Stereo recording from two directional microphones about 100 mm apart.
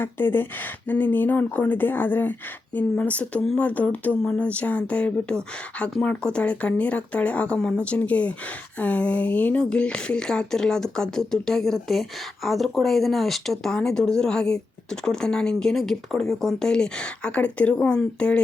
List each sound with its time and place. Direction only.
0.0 s speech: 20° left (ahead or behind)